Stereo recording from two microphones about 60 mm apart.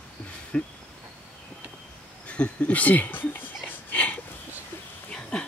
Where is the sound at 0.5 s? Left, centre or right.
Centre.